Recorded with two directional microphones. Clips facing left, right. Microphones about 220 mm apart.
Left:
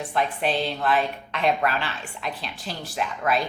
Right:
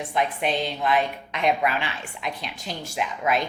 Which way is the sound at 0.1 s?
15° right (ahead or behind).